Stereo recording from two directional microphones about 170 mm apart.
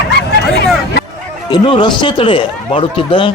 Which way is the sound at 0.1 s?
80° left.